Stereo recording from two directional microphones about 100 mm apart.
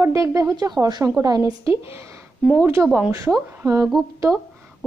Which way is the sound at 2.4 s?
5° right (ahead or behind).